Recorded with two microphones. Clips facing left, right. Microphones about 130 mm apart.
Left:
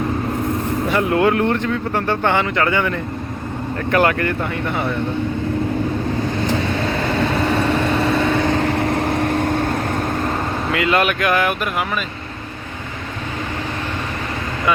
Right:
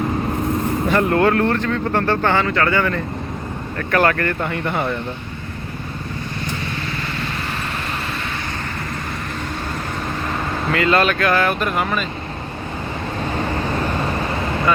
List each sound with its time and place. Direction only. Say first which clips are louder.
0.9 s speech: even; 10° left (ahead or behind)
8.5 s vehicle: left 10 dB; 80° left; by 9.6 s 55° left (ahead or behind)
10.7 s speech: right 1 dB; 10° left (ahead or behind)